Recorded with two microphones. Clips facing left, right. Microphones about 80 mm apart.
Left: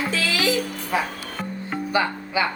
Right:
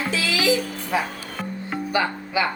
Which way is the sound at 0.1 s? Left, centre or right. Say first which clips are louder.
Even; left.